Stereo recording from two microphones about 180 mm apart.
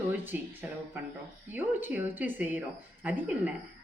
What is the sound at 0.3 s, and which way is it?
Speech, 10° right (ahead or behind).